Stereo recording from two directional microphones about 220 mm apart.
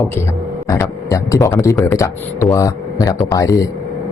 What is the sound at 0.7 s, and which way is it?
Speech, 15° left (ahead or behind).